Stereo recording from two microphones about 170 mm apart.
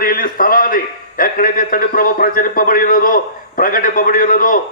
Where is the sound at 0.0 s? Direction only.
55° left (ahead or behind).